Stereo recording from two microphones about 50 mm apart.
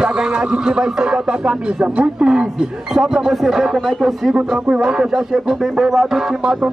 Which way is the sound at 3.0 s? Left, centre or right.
Centre.